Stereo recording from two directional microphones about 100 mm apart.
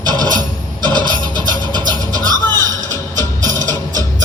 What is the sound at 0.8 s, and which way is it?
Vehicle, 45° right (ahead or behind).